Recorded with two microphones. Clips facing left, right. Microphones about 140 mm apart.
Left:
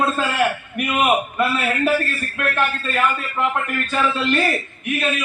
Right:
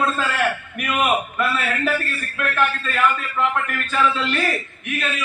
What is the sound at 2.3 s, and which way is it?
A man's voice, 25° left (ahead or behind).